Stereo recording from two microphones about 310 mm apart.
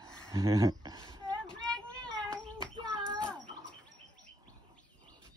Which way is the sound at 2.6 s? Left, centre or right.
Centre.